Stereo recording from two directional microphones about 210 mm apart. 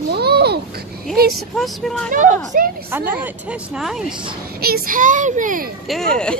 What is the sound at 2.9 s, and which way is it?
Speech, 10° right (ahead or behind).